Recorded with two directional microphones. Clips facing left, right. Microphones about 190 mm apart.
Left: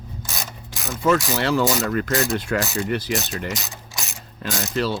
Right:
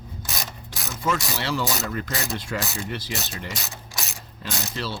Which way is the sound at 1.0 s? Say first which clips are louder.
Left 7 dB; 55° left (ahead or behind).